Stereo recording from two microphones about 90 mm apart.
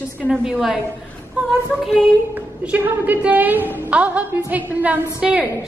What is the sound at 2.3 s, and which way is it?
A woman's voice, 20° right (ahead or behind).